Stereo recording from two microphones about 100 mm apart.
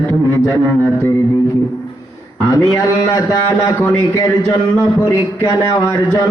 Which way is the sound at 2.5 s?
40° left (ahead or behind).